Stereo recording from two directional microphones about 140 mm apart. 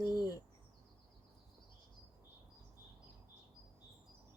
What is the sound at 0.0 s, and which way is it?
Bird, 25° left (ahead or behind).